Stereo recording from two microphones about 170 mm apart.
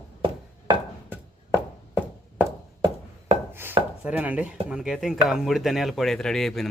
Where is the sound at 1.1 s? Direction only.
10° right (ahead or behind).